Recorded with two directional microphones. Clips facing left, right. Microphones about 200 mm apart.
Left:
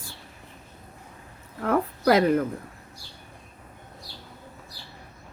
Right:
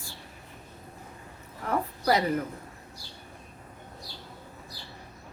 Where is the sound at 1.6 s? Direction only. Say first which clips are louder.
Left 5 dB; 55° left (ahead or behind).